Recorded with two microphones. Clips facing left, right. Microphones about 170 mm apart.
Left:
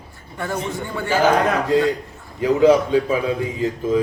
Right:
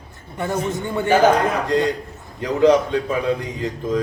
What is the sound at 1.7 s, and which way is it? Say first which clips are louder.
A man's voice: left 2 dB; 5° left (ahead or behind).